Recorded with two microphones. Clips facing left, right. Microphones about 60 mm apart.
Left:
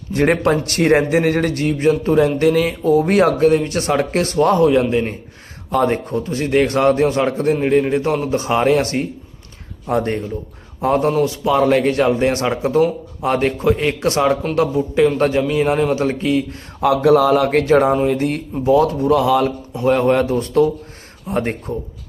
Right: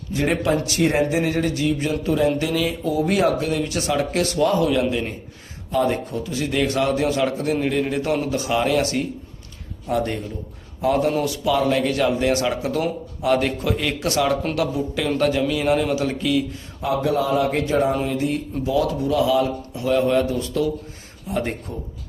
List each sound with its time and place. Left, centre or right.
0.1 s speech: left
5.7 s a man's voice: left
16.8 s a man's voice: left